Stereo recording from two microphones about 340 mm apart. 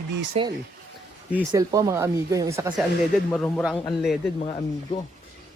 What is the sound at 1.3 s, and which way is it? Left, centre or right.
A man's voice, centre.